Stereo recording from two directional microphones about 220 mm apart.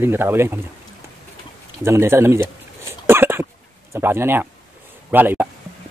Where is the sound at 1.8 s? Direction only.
10° right (ahead or behind).